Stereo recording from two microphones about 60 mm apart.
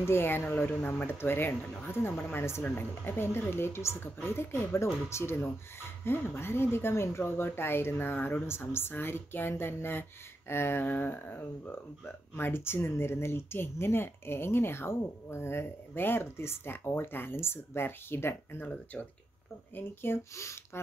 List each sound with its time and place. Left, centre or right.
0.0 s a woman's voice: left
20.3 s a woman's voice: left